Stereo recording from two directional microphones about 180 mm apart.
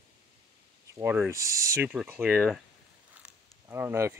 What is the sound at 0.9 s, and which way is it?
Speech, 10° right (ahead or behind).